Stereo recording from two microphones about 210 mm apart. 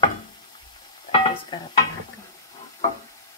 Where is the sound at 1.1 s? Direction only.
20° left (ahead or behind).